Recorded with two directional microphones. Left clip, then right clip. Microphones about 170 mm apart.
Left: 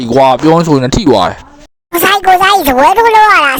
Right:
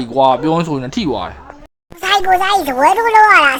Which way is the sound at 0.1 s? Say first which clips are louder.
Left 6 dB; 45° left (ahead or behind).